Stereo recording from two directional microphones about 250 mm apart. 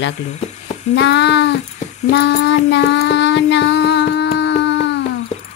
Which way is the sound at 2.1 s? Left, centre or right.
Left.